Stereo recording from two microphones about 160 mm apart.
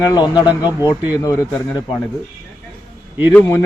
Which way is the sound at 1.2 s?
15° left (ahead or behind).